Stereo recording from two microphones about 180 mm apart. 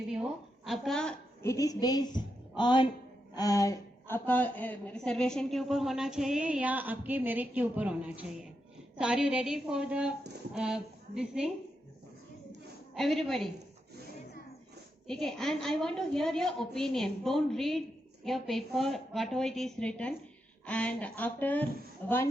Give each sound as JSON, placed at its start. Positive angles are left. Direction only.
{"t": 0.1, "sound": "a woman's voice", "side_deg": 0}
{"t": 1.5, "sound": "a woman's voice", "side_deg": 20}
{"t": 12.9, "sound": "a woman's voice", "side_deg": 0}
{"t": 15.0, "sound": "a woman's voice", "side_deg": 5}